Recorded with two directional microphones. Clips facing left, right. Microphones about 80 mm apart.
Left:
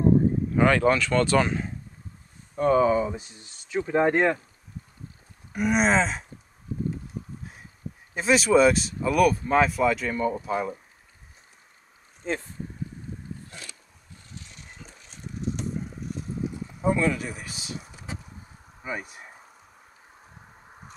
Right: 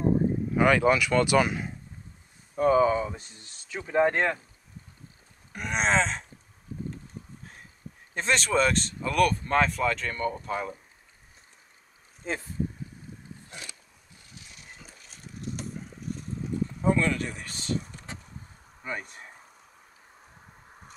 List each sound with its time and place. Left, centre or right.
0.6 s speech: centre
5.5 s speech: centre
8.1 s speech: centre
12.2 s speech: centre
13.5 s a sound: centre
14.3 s a sound: centre
18.8 s speech: centre